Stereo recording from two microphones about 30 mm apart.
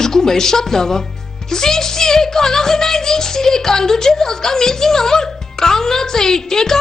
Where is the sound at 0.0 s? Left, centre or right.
Centre.